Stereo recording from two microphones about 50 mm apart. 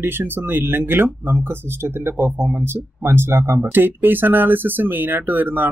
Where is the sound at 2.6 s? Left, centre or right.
Right.